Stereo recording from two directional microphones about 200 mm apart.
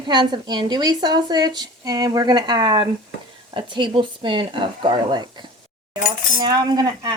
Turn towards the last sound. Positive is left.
turn(degrees=-20)  # may be behind; listen again after turning